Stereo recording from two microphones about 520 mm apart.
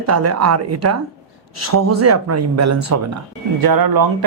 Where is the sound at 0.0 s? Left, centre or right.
Right.